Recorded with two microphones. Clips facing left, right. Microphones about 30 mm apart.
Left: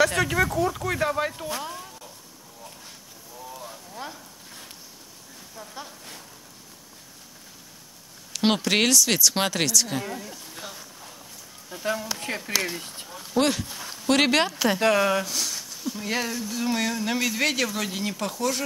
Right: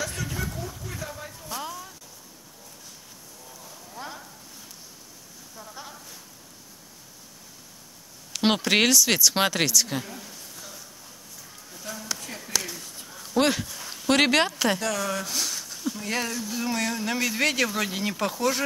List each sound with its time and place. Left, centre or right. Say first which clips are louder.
0.0 s speech: left 11 dB; left
4.0 s speech: left 1 dB; left
5.6 s speech: left 1 dB; left
8.3 s speech: even; centre
10.5 s a sound: left 4 dB; left
11.7 s speech: left 7 dB; left
13.1 s a sound: left 1 dB; centre
13.4 s speech: even; centre
14.8 s speech: left 7 dB; left
15.2 s speech: even; centre